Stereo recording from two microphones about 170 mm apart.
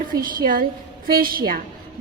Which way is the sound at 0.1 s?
55° right (ahead or behind).